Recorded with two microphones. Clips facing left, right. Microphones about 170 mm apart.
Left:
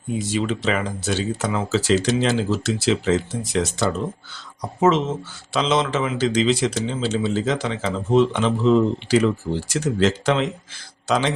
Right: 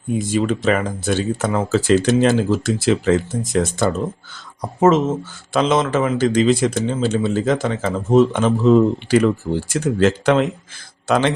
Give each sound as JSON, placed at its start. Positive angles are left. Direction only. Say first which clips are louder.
{"t": 0.2, "sound": "a man's voice", "louder": "right 4 dB", "side_deg": -50}